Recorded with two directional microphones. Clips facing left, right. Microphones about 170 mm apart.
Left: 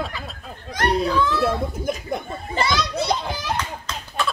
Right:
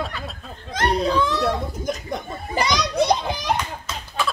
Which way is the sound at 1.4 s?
5° left (ahead or behind).